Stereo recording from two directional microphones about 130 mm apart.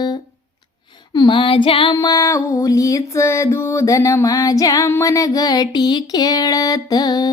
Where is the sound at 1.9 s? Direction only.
25° left (ahead or behind).